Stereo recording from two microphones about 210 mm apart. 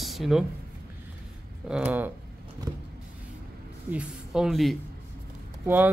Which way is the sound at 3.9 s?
5° right (ahead or behind).